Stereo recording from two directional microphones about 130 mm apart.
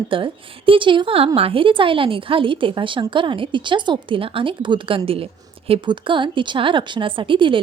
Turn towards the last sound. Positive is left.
turn(degrees=-40)  # may be behind; listen again after turning